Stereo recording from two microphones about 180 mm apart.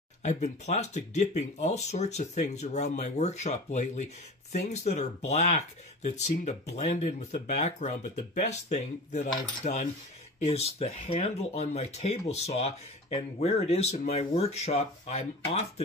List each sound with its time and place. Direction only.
0.2 s speech: 40° left (ahead or behind)